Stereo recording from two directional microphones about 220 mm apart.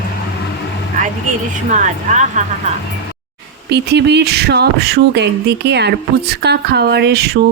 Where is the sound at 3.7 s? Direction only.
50° right (ahead or behind).